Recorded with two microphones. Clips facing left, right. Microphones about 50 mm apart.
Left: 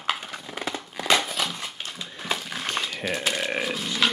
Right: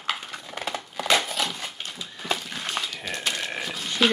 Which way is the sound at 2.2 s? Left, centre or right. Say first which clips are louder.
Even; centre.